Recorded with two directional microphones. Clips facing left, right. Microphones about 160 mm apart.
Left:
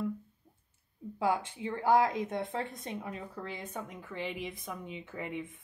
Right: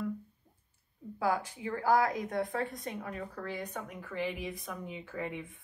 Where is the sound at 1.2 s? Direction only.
25° left (ahead or behind).